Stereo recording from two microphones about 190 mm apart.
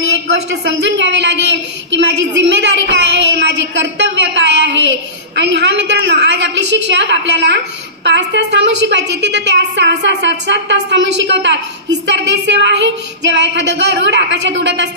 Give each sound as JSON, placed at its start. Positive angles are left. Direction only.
{"t": 0.5, "sound": "a woman's voice", "side_deg": -70}